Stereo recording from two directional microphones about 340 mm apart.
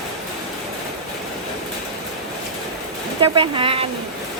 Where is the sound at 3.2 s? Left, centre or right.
Centre.